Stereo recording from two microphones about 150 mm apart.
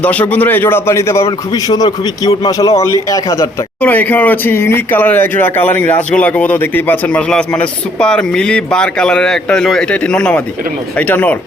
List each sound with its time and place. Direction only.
0.0 s a man's voice: 10° left (ahead or behind)
3.8 s speech: 10° left (ahead or behind)